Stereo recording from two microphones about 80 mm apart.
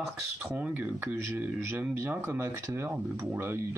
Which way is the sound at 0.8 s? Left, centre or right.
Right.